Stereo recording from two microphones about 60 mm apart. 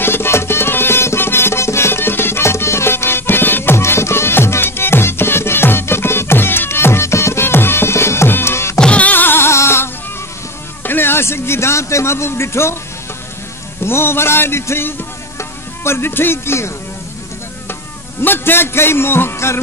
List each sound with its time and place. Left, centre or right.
0.0 s music: left
8.7 s music: centre
9.1 s music: left
10.8 s a man's voice: left
13.8 s music: left
18.2 s a man's voice: left